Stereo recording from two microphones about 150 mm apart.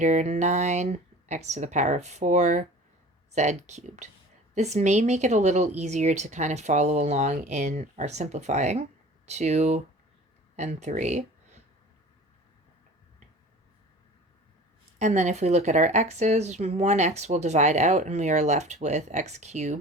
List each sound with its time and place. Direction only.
0.0 s a woman's voice: 50° right (ahead or behind)
14.9 s a woman's voice: 50° right (ahead or behind)